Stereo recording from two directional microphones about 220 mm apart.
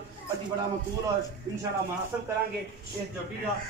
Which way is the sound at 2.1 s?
5° right (ahead or behind).